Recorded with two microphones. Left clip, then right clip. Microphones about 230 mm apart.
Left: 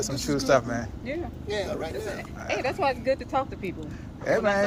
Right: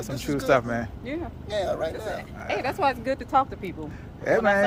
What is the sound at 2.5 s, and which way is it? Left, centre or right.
Speech, right.